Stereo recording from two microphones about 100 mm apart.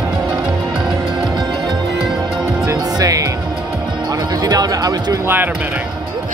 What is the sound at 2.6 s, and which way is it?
Music, 35° right (ahead or behind).